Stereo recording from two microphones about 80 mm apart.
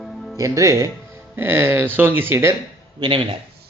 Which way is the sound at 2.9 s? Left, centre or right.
Right.